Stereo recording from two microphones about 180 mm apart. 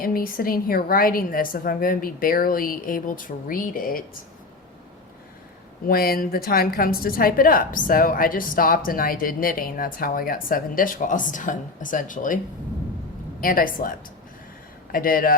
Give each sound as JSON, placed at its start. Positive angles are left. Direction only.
{"t": 0.0, "sound": "a woman's voice", "side_deg": 55}
{"t": 5.9, "sound": "a woman's voice", "side_deg": 55}
{"t": 13.4, "sound": "a woman's voice", "side_deg": 50}
{"t": 14.9, "sound": "a woman's voice", "side_deg": 50}